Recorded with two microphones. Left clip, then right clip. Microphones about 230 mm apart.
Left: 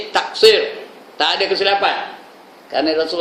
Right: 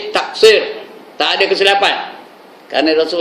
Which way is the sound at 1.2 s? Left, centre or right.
Centre.